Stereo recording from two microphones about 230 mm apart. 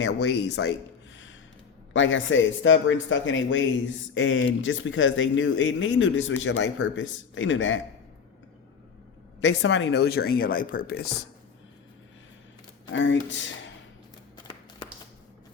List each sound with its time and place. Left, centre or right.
0.0 s speech: left
1.9 s speech: left
9.4 s speech: left
12.9 s speech: left